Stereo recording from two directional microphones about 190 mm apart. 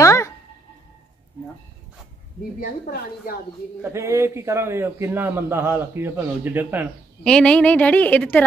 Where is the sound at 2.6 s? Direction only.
50° left (ahead or behind).